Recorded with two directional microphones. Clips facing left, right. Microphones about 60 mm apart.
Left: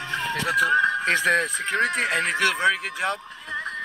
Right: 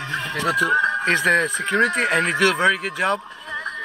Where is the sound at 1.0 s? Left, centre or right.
Right.